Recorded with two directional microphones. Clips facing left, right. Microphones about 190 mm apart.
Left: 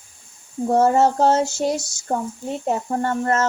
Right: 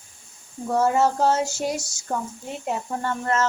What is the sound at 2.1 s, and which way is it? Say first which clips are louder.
A child's voice: left 5 dB; 40° left (ahead or behind).